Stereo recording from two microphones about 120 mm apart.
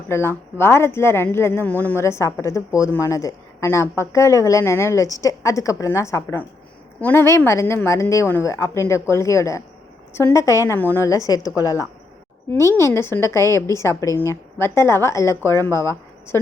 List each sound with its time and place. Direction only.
0.1 s speech: 20° left (ahead or behind)